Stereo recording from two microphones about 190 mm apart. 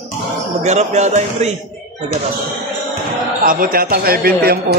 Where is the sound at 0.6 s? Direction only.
35° right (ahead or behind).